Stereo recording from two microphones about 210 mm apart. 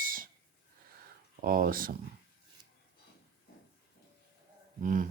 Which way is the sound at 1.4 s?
45° right (ahead or behind).